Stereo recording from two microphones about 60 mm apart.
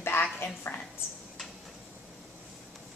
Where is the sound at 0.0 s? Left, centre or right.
Left.